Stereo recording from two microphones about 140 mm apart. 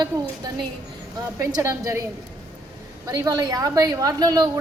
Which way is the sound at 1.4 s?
25° right (ahead or behind).